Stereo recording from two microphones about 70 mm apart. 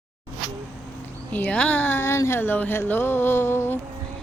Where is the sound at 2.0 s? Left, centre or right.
Left.